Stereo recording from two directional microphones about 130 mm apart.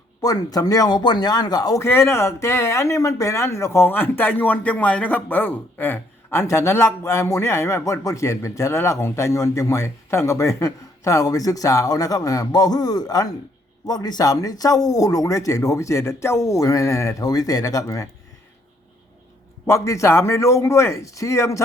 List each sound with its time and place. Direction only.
0.2 s speech: 30° left (ahead or behind)
19.6 s speech: 20° left (ahead or behind)